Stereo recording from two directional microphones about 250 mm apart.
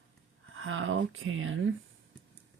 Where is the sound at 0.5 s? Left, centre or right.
Right.